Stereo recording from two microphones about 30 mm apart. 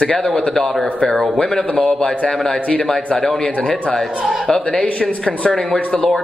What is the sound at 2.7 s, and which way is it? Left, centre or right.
A man's voice, centre.